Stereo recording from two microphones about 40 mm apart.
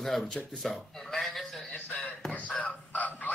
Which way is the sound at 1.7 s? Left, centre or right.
Left.